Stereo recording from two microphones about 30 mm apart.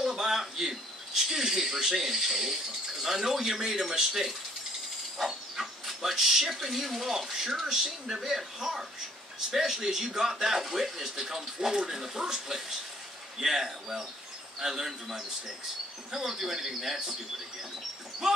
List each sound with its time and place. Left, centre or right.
0.0 s a man's voice: centre
5.2 s dog: centre
6.5 s a man's voice: centre
18.2 s a man's voice: centre